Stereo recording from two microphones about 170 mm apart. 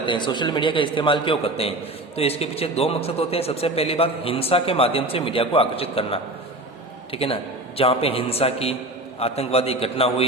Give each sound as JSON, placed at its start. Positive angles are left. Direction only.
{"t": 0.0, "sound": "a man's voice", "side_deg": 30}